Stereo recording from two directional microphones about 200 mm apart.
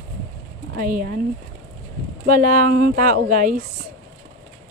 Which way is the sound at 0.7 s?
45° right (ahead or behind).